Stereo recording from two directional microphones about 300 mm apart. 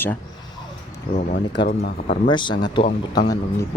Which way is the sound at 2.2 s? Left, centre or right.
Centre.